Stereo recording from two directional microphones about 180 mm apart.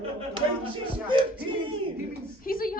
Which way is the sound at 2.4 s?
50° left (ahead or behind).